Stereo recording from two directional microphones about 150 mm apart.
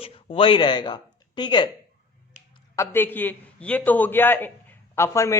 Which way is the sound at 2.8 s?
15° left (ahead or behind).